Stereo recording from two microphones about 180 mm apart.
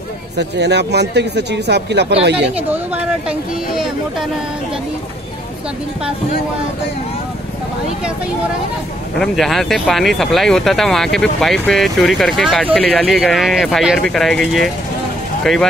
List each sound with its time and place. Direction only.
0.4 s speech: 70° right (ahead or behind)
2.3 s speech: 10° right (ahead or behind)
9.2 s speech: centre (ahead or behind)